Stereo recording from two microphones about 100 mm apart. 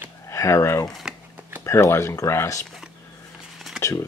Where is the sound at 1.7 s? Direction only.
30° left (ahead or behind).